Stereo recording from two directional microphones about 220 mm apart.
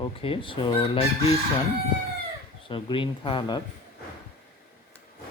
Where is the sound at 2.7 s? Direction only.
20° left (ahead or behind).